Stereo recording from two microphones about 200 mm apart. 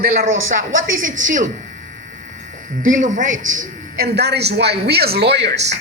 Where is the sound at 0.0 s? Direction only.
50° right (ahead or behind).